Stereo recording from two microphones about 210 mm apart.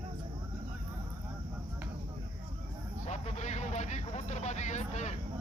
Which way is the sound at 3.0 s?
35° left (ahead or behind).